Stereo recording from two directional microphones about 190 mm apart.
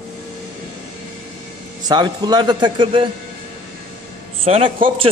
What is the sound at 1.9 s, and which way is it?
A man's voice, 20° right (ahead or behind).